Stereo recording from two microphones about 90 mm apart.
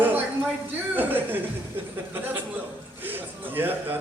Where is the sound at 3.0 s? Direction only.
20° right (ahead or behind).